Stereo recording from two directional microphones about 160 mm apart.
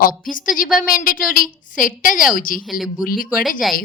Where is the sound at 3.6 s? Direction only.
Centre (ahead or behind).